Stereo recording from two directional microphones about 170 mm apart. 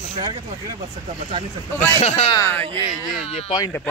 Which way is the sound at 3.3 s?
30° left (ahead or behind).